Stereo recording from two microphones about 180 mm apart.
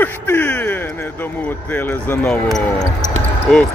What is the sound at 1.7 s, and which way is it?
Speech, 5° left (ahead or behind).